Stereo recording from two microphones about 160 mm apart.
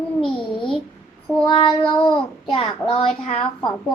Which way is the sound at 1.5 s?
30° left (ahead or behind).